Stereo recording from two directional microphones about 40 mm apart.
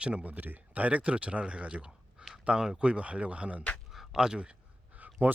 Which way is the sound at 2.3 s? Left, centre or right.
Centre.